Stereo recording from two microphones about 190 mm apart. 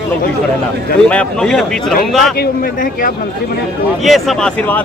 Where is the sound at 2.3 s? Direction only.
55° left (ahead or behind).